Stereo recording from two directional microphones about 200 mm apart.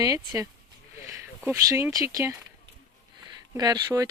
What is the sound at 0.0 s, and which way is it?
Speech, 15° right (ahead or behind).